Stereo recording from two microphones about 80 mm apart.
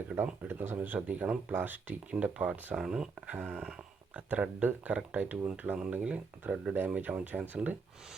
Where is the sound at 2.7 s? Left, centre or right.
Centre.